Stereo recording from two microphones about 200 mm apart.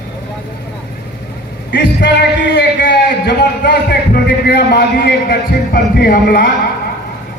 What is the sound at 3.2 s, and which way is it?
A man's voice, 50° left (ahead or behind).